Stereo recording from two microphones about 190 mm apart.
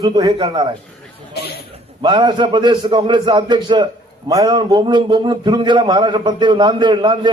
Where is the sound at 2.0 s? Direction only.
25° right (ahead or behind).